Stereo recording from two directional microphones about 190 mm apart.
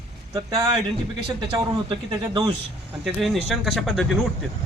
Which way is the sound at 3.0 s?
Centre (ahead or behind).